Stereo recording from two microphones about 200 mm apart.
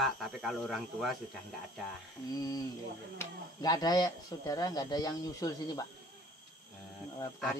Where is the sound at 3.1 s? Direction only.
20° left (ahead or behind).